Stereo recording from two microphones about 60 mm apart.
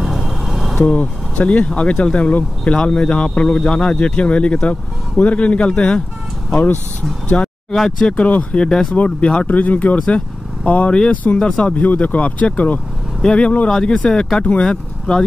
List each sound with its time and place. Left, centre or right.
0.0 s vehicle: centre
0.8 s speech: left
6.5 s speech: left
7.7 s speech: centre
8.1 s speech: left